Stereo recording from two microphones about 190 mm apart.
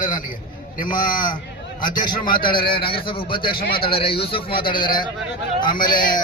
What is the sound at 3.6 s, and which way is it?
Speech, 50° left (ahead or behind).